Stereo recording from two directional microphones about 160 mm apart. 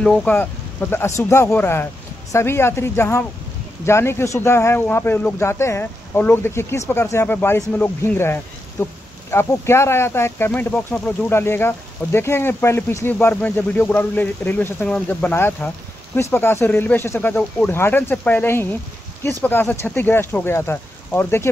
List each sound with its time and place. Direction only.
0.0 s speech: 5° left (ahead or behind)